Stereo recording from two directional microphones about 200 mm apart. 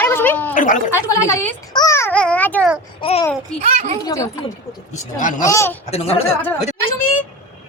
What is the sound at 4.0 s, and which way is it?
Speech, 15° left (ahead or behind).